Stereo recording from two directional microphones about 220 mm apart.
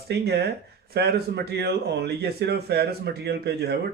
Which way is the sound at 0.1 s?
50° right (ahead or behind).